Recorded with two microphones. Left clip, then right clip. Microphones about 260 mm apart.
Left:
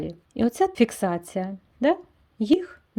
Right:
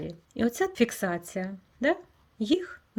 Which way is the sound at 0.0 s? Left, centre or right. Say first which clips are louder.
Left 4 dB; centre.